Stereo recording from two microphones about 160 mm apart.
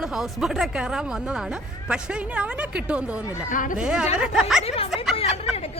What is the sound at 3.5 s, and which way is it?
Speech, 55° left (ahead or behind).